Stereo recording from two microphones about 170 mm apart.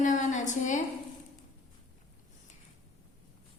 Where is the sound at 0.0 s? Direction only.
45° left (ahead or behind).